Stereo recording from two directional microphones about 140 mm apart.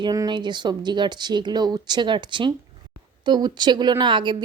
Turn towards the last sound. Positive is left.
turn(degrees=-35)  # may be behind; listen again after turning